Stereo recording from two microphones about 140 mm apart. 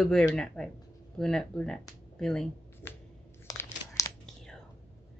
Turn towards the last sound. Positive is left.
turn(degrees=25)  # may be behind; listen again after turning